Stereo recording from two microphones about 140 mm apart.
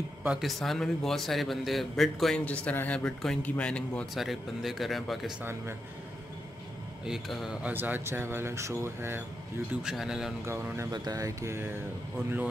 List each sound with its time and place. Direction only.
0.2 s a man's voice: 5° right (ahead or behind)
5.4 s speech: 20° right (ahead or behind)
7.1 s speech: centre (ahead or behind); by 9.2 s 20° right (ahead or behind)
9.8 s a man's voice: 5° right (ahead or behind)
10.4 s speech: 20° right (ahead or behind)